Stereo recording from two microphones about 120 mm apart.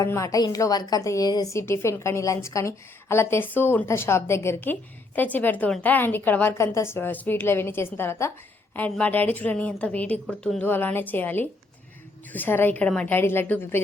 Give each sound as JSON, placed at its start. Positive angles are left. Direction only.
{"t": 0.0, "sound": "a woman's voice", "side_deg": 25}
{"t": 10.7, "sound": "a woman's voice", "side_deg": 15}